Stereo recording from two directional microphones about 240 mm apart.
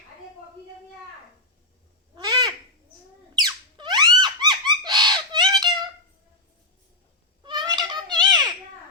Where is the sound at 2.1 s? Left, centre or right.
Centre.